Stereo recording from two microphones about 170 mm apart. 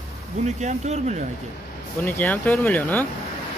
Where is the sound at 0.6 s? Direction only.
40° right (ahead or behind).